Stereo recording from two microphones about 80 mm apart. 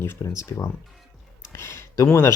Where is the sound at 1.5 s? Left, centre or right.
Left.